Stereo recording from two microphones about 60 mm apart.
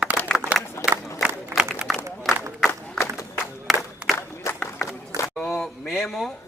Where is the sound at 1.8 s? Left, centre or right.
Centre.